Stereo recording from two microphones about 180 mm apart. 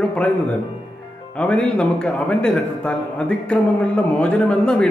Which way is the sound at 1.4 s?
5° left (ahead or behind).